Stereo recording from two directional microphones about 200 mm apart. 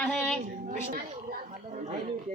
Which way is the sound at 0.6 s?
45° right (ahead or behind).